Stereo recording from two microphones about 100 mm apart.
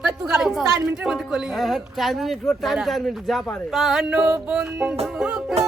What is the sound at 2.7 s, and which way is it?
Speech, centre (ahead or behind).